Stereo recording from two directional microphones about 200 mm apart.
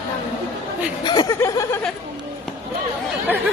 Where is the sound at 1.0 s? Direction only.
20° left (ahead or behind).